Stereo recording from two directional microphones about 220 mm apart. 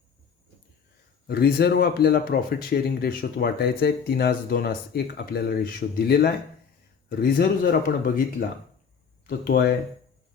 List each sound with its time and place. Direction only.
1.3 s speech: 45° left (ahead or behind)